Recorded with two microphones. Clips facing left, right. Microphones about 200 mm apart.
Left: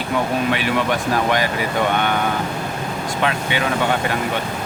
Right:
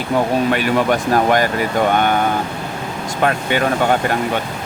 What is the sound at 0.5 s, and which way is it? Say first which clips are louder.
Speech: right 4 dB; 45° right (ahead or behind).